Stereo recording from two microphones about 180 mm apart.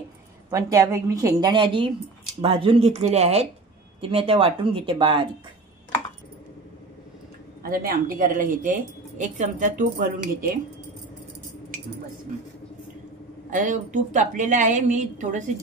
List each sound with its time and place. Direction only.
0.5 s a woman's voice: 15° right (ahead or behind)
7.6 s speech: 55° right (ahead or behind)
13.5 s speech: 45° right (ahead or behind)